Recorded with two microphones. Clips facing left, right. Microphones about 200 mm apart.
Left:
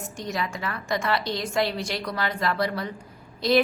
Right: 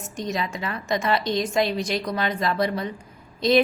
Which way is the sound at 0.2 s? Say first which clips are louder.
Right 3 dB; 20° right (ahead or behind).